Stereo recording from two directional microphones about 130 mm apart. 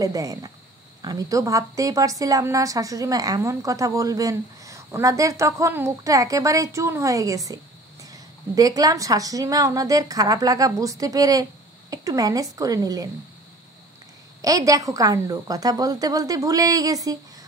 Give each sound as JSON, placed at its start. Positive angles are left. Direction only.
{"t": 0.0, "sound": "a woman's voice", "side_deg": -25}
{"t": 14.4, "sound": "a woman's voice", "side_deg": -25}